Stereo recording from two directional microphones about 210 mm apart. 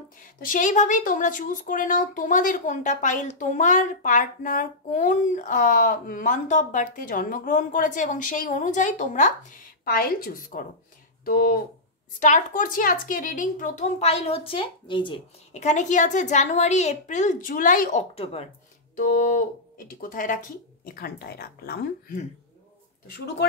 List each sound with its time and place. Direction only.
0.4 s a woman's voice: 40° left (ahead or behind)
18.9 s a woman's voice: 40° left (ahead or behind)